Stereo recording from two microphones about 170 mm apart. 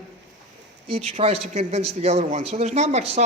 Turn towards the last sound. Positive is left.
turn(degrees=-40)  # may be behind; listen again after turning